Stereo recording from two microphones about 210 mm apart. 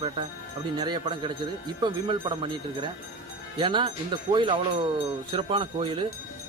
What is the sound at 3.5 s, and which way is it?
Speech, 20° right (ahead or behind).